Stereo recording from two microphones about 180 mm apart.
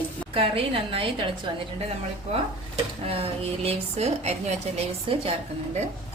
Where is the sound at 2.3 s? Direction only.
35° right (ahead or behind).